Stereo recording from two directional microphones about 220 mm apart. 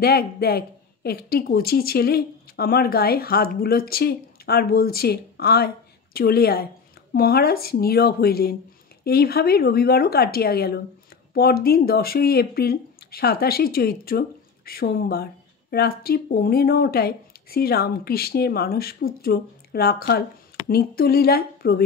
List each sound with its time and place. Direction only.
0.0 s speech: 45° left (ahead or behind)